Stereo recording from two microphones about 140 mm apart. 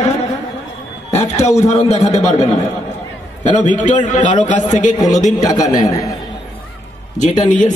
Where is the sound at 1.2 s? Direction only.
50° left (ahead or behind).